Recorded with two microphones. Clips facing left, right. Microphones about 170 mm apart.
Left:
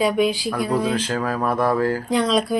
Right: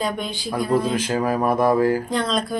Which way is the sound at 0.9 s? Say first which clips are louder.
Right 2 dB; 10° right (ahead or behind).